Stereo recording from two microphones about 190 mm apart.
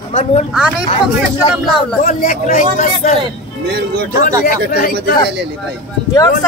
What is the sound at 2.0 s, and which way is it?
Speech, 45° left (ahead or behind).